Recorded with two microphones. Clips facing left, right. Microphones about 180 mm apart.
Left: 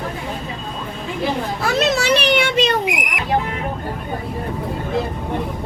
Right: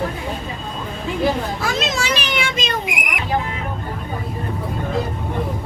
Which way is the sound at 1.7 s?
65° left (ahead or behind).